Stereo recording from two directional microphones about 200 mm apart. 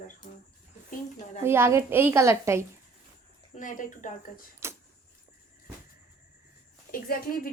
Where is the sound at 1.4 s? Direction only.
10° right (ahead or behind).